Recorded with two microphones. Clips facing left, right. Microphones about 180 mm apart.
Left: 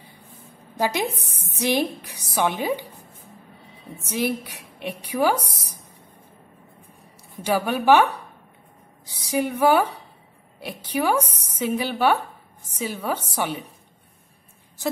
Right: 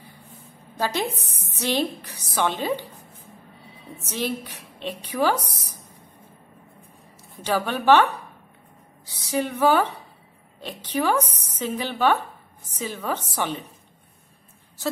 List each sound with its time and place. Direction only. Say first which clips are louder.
0.7 s a woman's voice: left 2 dB; 10° left (ahead or behind)
4.0 s a woman's voice: left 3 dB; 10° left (ahead or behind)
7.4 s a woman's voice: left 1 dB; 10° left (ahead or behind)